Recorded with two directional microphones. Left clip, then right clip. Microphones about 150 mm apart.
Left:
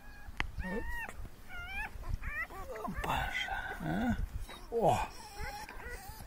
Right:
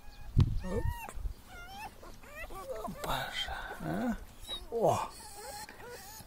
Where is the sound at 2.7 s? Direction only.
5° right (ahead or behind).